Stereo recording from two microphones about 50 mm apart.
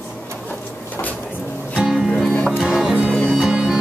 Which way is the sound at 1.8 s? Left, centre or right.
Centre.